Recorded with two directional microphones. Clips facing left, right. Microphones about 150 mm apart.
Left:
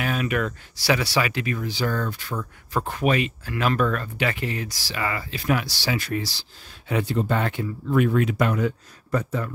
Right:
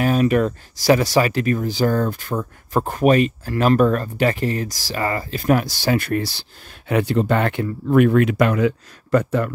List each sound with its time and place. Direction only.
0.0 s speech: 40° right (ahead or behind); by 6.4 s 55° right (ahead or behind)
6.9 s speech: 70° right (ahead or behind)